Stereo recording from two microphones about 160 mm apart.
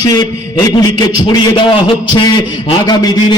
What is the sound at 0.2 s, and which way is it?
A man's voice, 25° left (ahead or behind).